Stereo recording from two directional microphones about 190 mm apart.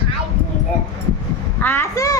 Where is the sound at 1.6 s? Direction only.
15° left (ahead or behind).